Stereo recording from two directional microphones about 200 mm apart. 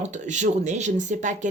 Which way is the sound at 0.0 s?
35° right (ahead or behind).